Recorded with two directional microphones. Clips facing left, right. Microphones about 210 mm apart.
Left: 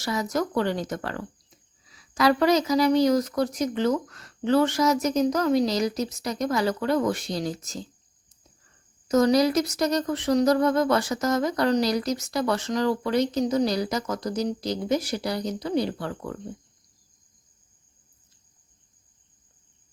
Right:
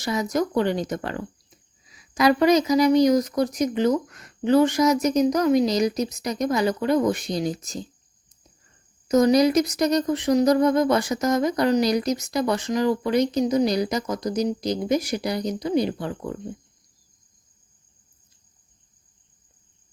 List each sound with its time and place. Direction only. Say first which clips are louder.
0.0 s speech: right 3 dB; 20° right (ahead or behind)
9.0 s a woman's voice: right 2 dB; 15° right (ahead or behind)
13.7 s speech: right 3 dB; 15° right (ahead or behind)